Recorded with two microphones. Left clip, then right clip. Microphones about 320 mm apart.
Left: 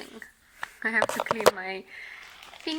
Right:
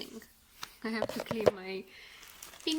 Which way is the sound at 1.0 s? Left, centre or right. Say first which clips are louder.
Left 10 dB; left.